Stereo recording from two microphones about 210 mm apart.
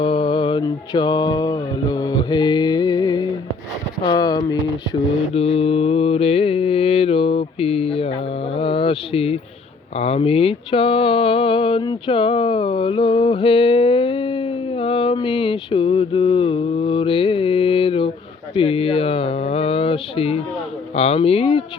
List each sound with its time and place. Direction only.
0.0 s mantra: 25° left (ahead or behind)
4.0 s speech: 20° left (ahead or behind)
5.3 s mantra: 30° left (ahead or behind)
8.5 s speech: 25° left (ahead or behind)
10.0 s a sound: 30° left (ahead or behind)
20.9 s speech: 30° left (ahead or behind)